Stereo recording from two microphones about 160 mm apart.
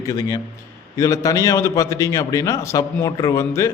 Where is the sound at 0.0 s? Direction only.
20° left (ahead or behind).